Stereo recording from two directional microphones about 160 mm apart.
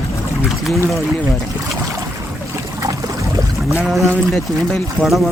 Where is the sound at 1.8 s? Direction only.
20° right (ahead or behind).